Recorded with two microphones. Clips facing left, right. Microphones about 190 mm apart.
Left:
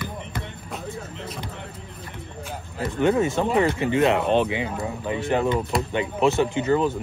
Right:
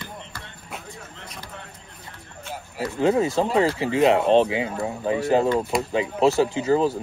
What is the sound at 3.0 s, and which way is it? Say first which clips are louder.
Speech: even; 30° right (ahead or behind).